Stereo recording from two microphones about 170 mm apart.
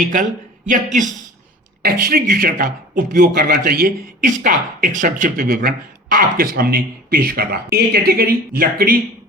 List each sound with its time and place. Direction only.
0.7 s speech: 45° right (ahead or behind)
1.8 s speech: 60° right (ahead or behind)